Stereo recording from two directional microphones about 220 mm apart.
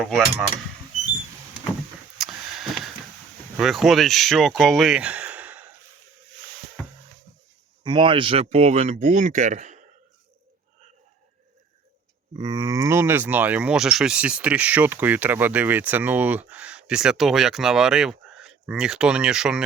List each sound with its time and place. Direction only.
0.0 s speech: centre (ahead or behind)
2.1 s a sound: centre (ahead or behind)
3.6 s speech: centre (ahead or behind)
6.8 s music: 5° left (ahead or behind)
7.9 s speech: 20° right (ahead or behind)
12.4 s speech: 15° right (ahead or behind)